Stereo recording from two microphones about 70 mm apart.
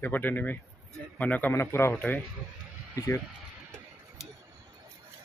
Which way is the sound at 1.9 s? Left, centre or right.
Left.